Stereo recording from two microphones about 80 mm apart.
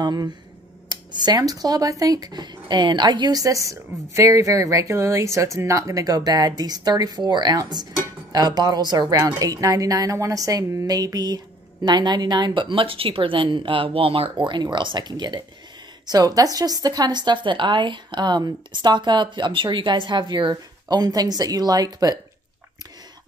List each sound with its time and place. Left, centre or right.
0.0 s speech: right
16.1 s speech: right